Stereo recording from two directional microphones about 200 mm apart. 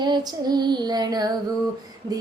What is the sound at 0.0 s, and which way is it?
Female singing, 20° right (ahead or behind).